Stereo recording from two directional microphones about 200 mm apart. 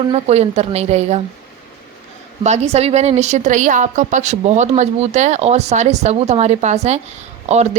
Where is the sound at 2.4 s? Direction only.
35° right (ahead or behind).